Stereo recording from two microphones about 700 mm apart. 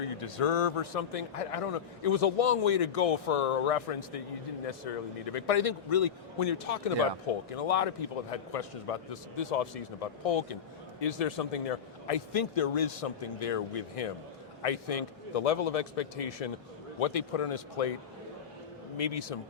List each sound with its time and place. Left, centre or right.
0.2 s a man's voice: left
18.9 s a man's voice: left